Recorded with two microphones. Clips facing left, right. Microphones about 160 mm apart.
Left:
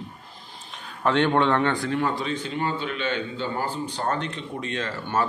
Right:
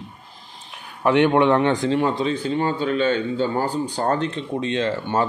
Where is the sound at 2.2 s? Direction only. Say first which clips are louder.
Right 6 dB; 30° right (ahead or behind).